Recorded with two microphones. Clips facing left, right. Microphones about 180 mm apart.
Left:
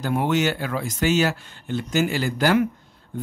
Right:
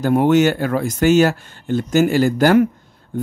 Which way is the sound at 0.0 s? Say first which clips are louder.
Right 8 dB; 50° right (ahead or behind).